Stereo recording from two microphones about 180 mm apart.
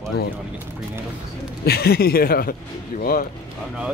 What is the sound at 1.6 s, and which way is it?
Speech, 60° left (ahead or behind).